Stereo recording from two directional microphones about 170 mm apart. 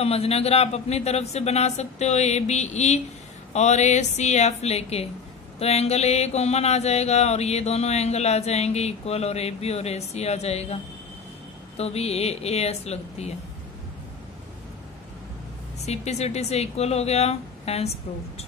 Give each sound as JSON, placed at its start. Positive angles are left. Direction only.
{"t": 0.0, "sound": "mantra", "side_deg": 35}
{"t": 15.8, "sound": "mantra", "side_deg": 40}